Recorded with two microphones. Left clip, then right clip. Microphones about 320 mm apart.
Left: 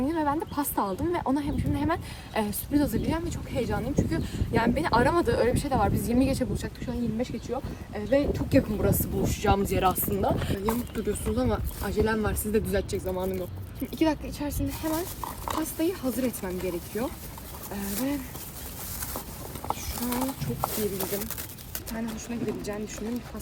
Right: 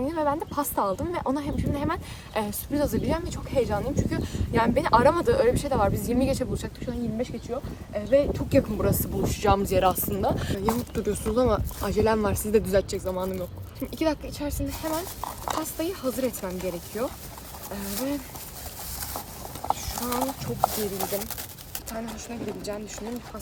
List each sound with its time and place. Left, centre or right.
0.1 s a woman's voice: centre
10.9 s a woman's voice: right
17.7 s a woman's voice: centre
19.6 s speech: centre
22.6 s a woman's voice: centre